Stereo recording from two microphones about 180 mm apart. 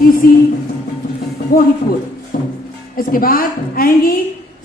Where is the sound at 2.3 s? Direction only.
50° left (ahead or behind).